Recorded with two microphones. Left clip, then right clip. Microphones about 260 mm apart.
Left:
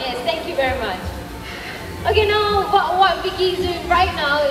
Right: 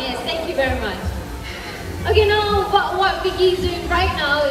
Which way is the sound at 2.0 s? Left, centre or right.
Left.